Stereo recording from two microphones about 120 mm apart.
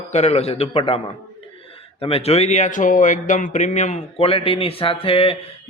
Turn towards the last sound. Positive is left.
turn(degrees=50)  # may be behind; listen again after turning